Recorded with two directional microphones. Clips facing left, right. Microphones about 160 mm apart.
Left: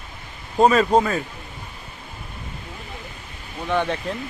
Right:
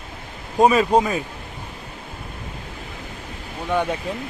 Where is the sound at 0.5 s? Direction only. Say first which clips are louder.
Even; 10° right (ahead or behind).